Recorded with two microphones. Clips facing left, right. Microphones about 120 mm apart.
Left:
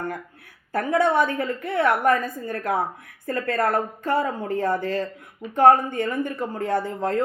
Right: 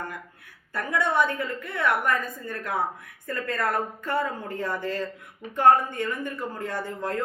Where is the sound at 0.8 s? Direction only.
55° left (ahead or behind).